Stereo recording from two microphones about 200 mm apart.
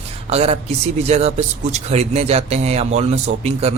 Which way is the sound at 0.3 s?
30° right (ahead or behind).